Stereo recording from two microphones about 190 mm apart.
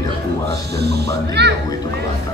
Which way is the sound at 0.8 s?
60° right (ahead or behind).